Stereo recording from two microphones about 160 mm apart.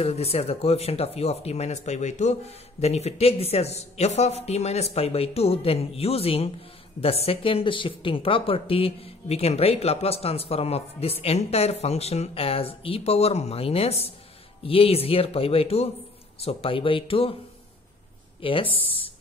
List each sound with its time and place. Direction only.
0.0 s a woman's voice: 40° left (ahead or behind)
18.4 s a woman's voice: 35° left (ahead or behind)